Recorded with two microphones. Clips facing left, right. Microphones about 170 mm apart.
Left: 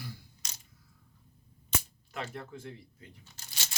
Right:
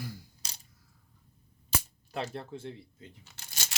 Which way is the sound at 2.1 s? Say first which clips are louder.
Right 4 dB; 30° right (ahead or behind).